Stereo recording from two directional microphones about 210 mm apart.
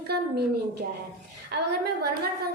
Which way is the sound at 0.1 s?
50° right (ahead or behind).